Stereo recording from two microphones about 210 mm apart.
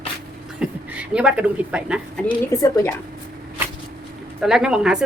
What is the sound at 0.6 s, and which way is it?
A woman's voice, 5° right (ahead or behind).